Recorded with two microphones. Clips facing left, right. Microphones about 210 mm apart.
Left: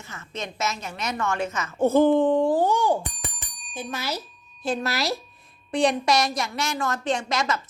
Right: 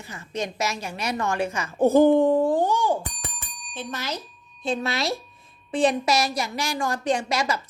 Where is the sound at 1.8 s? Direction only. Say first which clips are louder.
Right 2 dB; 15° right (ahead or behind).